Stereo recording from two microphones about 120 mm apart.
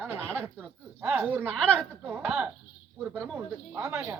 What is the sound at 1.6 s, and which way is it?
Speech, 5° left (ahead or behind).